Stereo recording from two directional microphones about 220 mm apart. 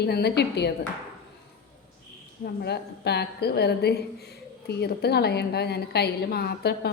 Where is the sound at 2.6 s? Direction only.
50° left (ahead or behind).